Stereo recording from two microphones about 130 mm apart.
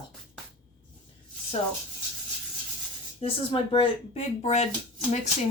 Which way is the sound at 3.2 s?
45° left (ahead or behind).